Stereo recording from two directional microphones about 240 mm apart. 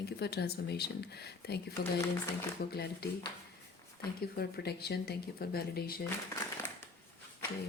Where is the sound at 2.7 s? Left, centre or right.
Left.